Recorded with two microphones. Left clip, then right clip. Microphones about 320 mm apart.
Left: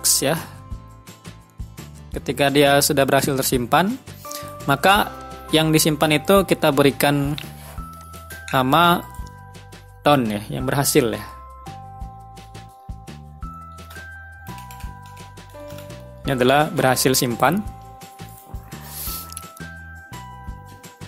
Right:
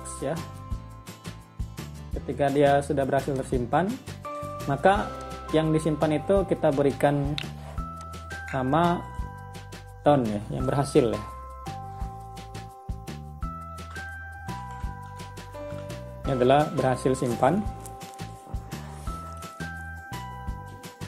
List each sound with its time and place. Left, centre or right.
2.2 s speech: left
3.9 s music: centre
4.6 s speech: left
5.1 s music: centre
5.5 s speech: left
8.5 s speech: left
10.0 s speech: left
15.5 s music: centre
16.3 s speech: left
19.4 s music: centre